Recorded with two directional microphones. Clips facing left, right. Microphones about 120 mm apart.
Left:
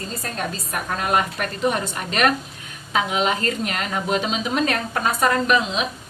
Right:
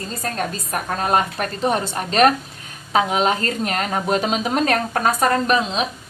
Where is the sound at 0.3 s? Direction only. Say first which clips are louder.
Right 2 dB; 40° right (ahead or behind).